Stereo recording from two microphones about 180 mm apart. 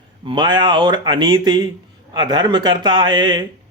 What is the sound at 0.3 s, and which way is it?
Speech, 25° right (ahead or behind).